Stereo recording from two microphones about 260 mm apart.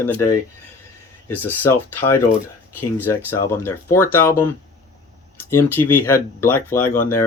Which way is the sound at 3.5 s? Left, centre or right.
Centre.